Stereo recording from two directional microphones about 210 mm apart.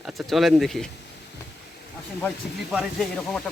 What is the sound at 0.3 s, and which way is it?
Speech, centre (ahead or behind).